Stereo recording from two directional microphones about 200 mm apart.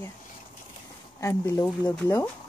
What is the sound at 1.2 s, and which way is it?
Speech, 10° left (ahead or behind).